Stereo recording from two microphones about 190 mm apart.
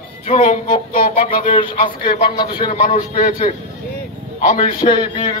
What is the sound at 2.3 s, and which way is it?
Speech, 25° left (ahead or behind).